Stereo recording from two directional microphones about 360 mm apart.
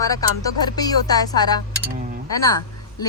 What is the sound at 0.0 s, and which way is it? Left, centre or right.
Speech, centre.